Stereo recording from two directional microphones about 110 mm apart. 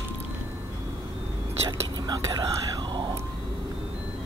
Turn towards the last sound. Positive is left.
turn(degrees=-45)  # may be behind; listen again after turning